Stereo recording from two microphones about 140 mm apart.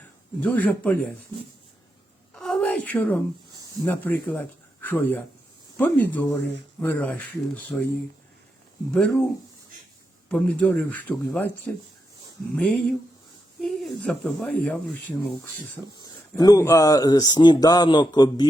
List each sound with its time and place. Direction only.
0.3 s speech: 10° left (ahead or behind)
2.3 s a sound: 5° left (ahead or behind)
3.8 s speech: 15° left (ahead or behind)
8.9 s speech: 5° left (ahead or behind)
10.2 s speech: 10° left (ahead or behind)
16.4 s speech: 25° left (ahead or behind)